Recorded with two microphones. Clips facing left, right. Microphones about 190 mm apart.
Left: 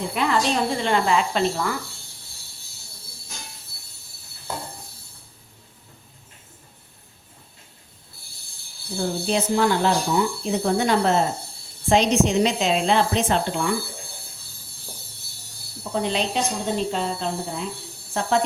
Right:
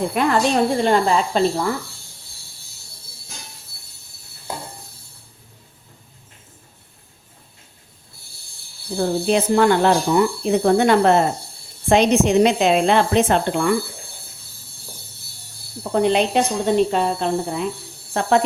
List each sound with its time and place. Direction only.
0.1 s speech: 50° right (ahead or behind); by 1.7 s 35° right (ahead or behind)
9.0 s speech: 60° right (ahead or behind)
15.8 s speech: 60° right (ahead or behind)